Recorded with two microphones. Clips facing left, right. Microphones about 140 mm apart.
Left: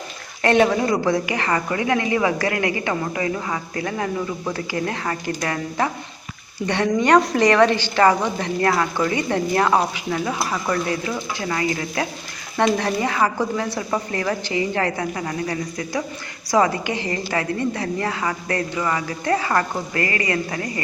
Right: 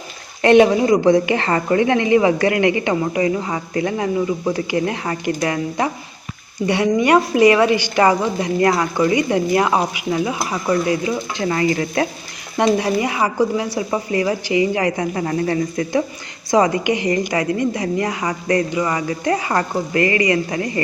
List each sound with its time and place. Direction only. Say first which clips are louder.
0.4 s a woman's voice: right 5 dB; 20° right (ahead or behind)
12.8 s a woman's voice: right 2 dB; 15° right (ahead or behind)
15.1 s a woman's voice: right 6 dB; 30° right (ahead or behind)